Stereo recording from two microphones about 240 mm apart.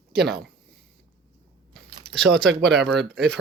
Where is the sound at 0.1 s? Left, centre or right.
Right.